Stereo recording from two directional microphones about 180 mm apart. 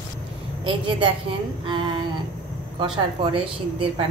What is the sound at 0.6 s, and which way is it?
A woman's voice, 30° right (ahead or behind).